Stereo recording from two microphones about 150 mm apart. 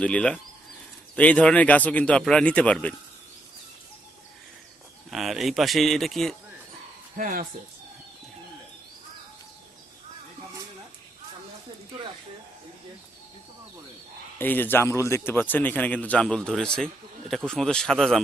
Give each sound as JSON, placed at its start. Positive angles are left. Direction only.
{"t": 0.0, "sound": "speech", "side_deg": 5}
{"t": 5.1, "sound": "a man's voice", "side_deg": 0}
{"t": 7.2, "sound": "speech", "side_deg": -70}
{"t": 14.3, "sound": "a man's voice", "side_deg": 10}